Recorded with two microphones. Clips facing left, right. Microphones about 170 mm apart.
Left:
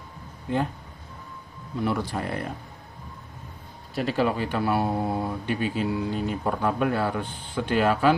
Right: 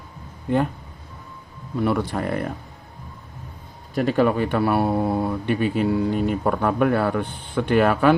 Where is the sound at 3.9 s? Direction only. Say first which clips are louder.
Right 5 dB; 50° right (ahead or behind).